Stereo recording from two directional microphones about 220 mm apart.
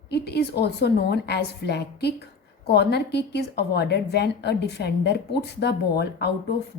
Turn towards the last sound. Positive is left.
turn(degrees=50)  # may be behind; listen again after turning